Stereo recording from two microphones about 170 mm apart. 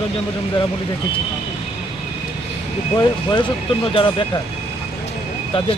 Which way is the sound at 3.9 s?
30° left (ahead or behind).